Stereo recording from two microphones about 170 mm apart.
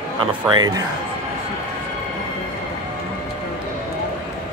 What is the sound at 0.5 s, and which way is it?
Speech, 25° right (ahead or behind).